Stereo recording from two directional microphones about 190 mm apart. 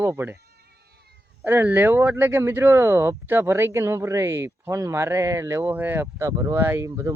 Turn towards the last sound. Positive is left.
turn(degrees=-15)  # may be behind; listen again after turning